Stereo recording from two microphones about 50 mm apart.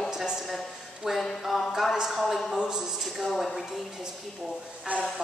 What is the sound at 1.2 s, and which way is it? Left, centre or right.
Music, centre.